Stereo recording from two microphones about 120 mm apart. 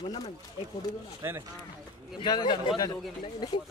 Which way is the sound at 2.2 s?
40° left (ahead or behind).